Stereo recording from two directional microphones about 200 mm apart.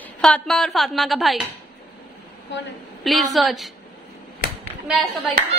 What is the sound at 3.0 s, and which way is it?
Speech, centre (ahead or behind).